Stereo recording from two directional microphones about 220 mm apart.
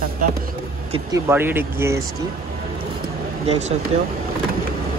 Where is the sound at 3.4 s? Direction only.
30° right (ahead or behind).